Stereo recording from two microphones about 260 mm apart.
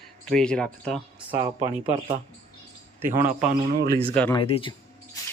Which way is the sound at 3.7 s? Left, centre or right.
Right.